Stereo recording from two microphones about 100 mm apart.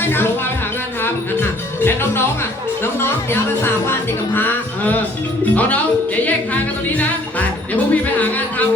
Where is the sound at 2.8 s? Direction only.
25° left (ahead or behind).